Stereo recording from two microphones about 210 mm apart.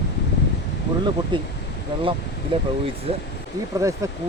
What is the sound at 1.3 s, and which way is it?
Speech, 20° right (ahead or behind).